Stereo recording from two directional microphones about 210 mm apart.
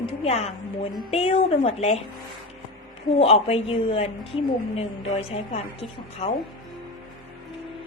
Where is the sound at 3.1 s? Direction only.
30° left (ahead or behind).